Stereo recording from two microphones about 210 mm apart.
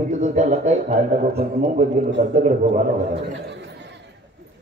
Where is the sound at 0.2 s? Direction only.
35° right (ahead or behind).